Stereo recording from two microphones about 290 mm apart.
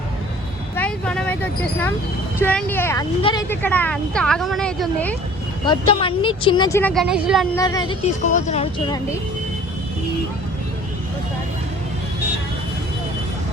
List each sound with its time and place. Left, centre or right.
0.8 s vehicle: centre
2.4 s speech: centre
5.6 s a woman's voice: centre
7.5 s speech: centre